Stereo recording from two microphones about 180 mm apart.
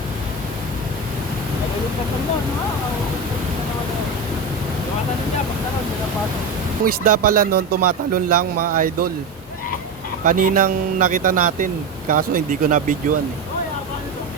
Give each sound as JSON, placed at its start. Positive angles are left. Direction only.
{"t": 6.8, "sound": "a man's voice", "side_deg": -50}
{"t": 10.2, "sound": "a man's voice", "side_deg": -50}